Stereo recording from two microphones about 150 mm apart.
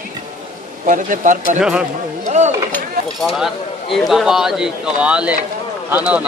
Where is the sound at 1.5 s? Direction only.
5° right (ahead or behind).